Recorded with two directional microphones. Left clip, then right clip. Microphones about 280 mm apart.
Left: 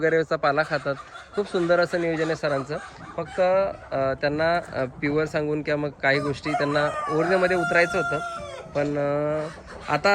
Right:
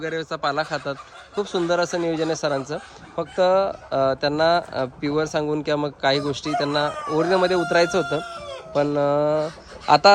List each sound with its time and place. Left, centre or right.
0.0 s speech: centre